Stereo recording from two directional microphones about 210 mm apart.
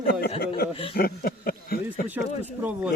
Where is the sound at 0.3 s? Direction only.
45° left (ahead or behind).